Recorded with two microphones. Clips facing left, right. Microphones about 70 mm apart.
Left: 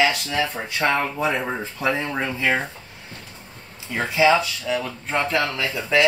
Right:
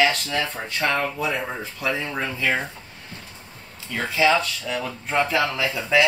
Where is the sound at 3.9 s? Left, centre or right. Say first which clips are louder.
Left 2 dB; centre.